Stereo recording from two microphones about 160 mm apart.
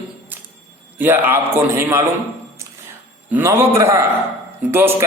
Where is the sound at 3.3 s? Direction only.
15° right (ahead or behind).